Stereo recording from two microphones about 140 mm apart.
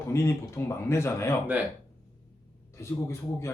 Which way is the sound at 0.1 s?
20° left (ahead or behind).